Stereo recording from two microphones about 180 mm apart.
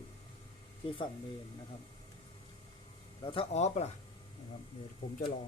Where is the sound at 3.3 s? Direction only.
35° left (ahead or behind).